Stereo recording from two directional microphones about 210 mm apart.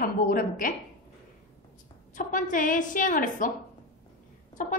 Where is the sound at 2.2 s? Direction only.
40° left (ahead or behind).